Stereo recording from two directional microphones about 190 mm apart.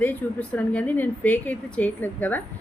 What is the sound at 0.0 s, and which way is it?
Speech, 10° left (ahead or behind).